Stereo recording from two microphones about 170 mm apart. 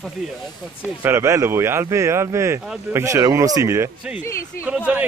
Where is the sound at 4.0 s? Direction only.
5° right (ahead or behind).